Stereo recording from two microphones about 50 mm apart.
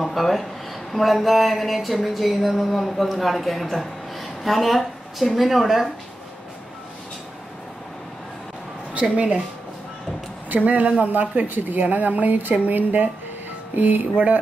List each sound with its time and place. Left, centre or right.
0.0 s speech: centre
0.9 s a sound: centre
8.9 s speech: right
10.5 s a woman's voice: right